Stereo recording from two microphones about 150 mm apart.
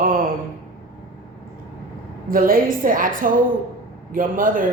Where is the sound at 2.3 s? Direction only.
70° right (ahead or behind).